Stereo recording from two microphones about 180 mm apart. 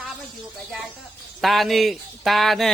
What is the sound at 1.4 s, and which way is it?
Speech, centre (ahead or behind).